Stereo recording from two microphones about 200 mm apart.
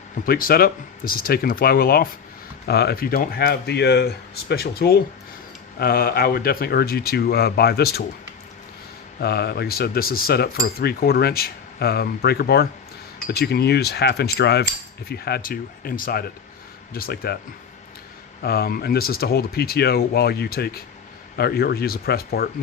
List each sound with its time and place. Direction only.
0.3 s speech: 45° left (ahead or behind)
9.2 s speech: 55° left (ahead or behind)
18.4 s speech: 50° left (ahead or behind)